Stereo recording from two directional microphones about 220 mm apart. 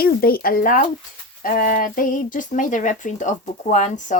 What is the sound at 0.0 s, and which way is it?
Speech, 45° left (ahead or behind).